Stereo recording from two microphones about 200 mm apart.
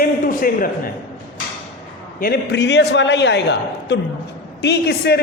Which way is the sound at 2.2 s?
55° left (ahead or behind).